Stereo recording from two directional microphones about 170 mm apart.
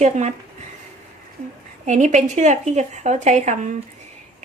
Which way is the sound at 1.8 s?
45° right (ahead or behind).